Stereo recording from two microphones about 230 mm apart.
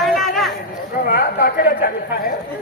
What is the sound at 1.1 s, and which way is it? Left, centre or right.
A woman's voice, left.